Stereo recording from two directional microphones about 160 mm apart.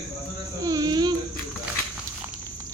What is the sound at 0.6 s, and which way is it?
Speech, 20° right (ahead or behind).